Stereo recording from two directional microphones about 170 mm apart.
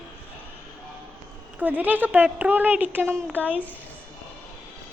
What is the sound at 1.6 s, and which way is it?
Speech, 10° right (ahead or behind).